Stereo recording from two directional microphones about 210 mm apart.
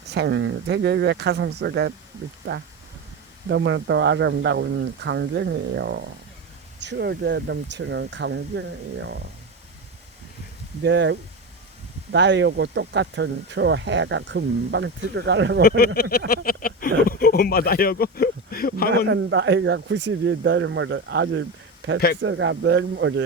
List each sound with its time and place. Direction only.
0.1 s speech: 55° right (ahead or behind)
3.5 s speech: 60° right (ahead or behind)
10.8 s speech: 55° right (ahead or behind)
15.6 s speech: 50° left (ahead or behind)
19.0 s speech: 65° right (ahead or behind)